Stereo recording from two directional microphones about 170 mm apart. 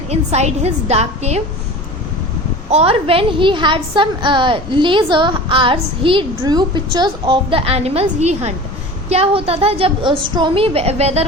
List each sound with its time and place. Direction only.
0.1 s a woman's voice: 40° right (ahead or behind)
2.6 s a woman's voice: 35° right (ahead or behind)